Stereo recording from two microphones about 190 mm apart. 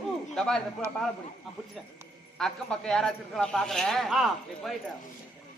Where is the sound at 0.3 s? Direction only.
5° left (ahead or behind).